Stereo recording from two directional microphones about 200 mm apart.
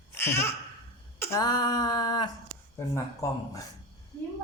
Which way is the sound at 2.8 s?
15° left (ahead or behind).